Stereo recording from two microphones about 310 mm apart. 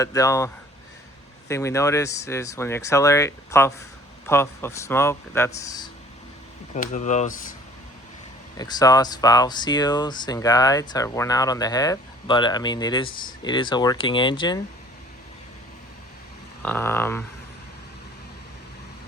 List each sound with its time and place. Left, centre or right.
0.0 s speech: centre
6.7 s speech: left
8.5 s speech: centre
16.6 s speech: centre